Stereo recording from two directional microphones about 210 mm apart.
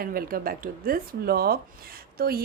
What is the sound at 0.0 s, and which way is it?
Speech, 45° right (ahead or behind).